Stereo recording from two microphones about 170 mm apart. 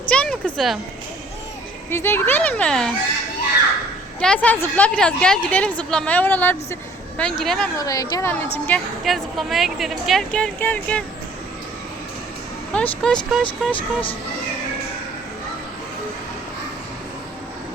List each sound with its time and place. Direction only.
0.1 s a sound: 5° left (ahead or behind)
1.9 s a woman's voice: 15° left (ahead or behind)
4.2 s a woman's voice: 5° left (ahead or behind)
7.8 s a woman's voice: 20° left (ahead or behind)
12.7 s a woman's voice: 5° left (ahead or behind)
13.7 s speech: 30° left (ahead or behind)